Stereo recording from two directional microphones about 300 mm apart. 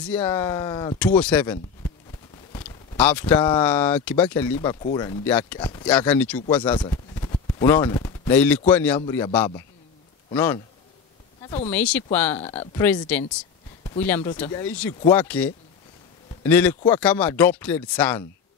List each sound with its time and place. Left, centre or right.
0.0 s speech: centre
11.4 s speech: left
11.7 s speech: centre
12.4 s speech: left
12.8 s speech: centre